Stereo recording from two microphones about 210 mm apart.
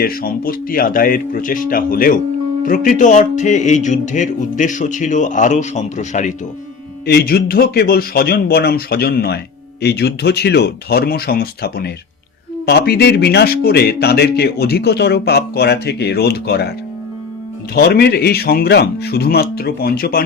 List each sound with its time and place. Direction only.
0.0 s speech: 45° left (ahead or behind)
2.6 s music: 40° left (ahead or behind)
7.1 s speech: 50° left (ahead or behind)
17.7 s speech: 50° left (ahead or behind)